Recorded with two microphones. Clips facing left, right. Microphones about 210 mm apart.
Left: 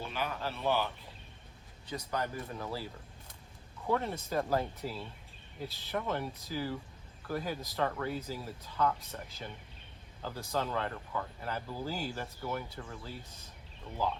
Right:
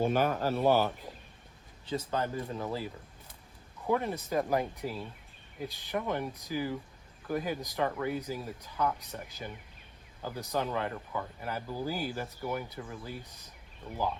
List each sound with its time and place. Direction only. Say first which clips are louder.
0.0 s speech: right 9 dB; 45° right (ahead or behind)
1.9 s speech: right 4 dB; 25° right (ahead or behind)
10.5 s speech: right 2 dB; 15° right (ahead or behind)